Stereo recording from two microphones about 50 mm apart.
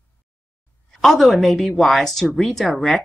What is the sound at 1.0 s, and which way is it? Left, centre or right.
Speech, centre.